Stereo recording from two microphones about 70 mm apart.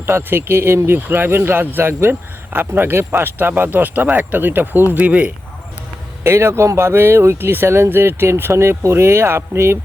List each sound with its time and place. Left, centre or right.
0.0 s speech: right
6.2 s speech: right